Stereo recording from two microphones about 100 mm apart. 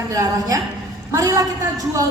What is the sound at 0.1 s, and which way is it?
A woman's voice, 35° right (ahead or behind).